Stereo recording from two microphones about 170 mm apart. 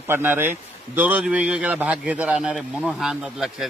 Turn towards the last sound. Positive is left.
turn(degrees=-5)  # may be behind; listen again after turning